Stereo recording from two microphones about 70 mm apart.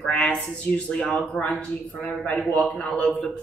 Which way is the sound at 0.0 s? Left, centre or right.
Centre.